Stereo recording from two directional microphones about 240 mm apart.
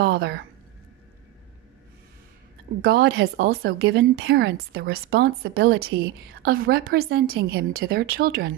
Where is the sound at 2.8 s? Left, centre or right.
Right.